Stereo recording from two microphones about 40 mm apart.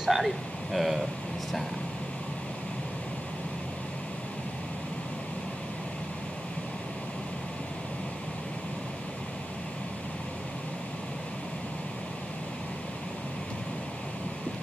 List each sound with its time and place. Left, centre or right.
0.0 s speech: centre